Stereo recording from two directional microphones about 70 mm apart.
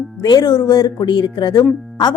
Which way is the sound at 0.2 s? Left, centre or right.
Left.